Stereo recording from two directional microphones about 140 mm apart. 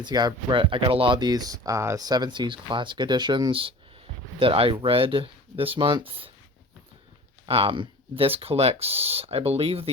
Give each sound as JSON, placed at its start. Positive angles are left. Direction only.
{"t": 0.0, "sound": "speech", "side_deg": -30}
{"t": 7.4, "sound": "speech", "side_deg": -40}